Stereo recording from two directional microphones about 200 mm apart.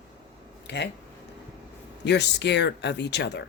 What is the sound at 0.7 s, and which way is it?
Speech, 60° left (ahead or behind).